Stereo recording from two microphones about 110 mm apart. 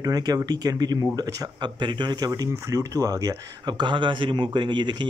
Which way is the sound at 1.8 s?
45° right (ahead or behind).